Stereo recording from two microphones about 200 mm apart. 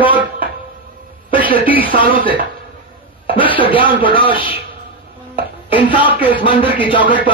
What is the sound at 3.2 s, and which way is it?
Speech, 25° left (ahead or behind).